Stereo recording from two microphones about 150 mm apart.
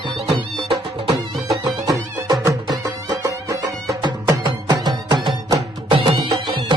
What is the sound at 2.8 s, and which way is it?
Music, 25° right (ahead or behind).